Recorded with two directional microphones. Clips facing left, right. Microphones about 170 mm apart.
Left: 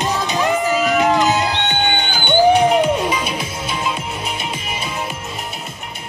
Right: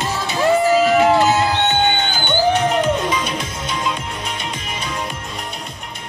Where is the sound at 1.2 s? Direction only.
15° left (ahead or behind).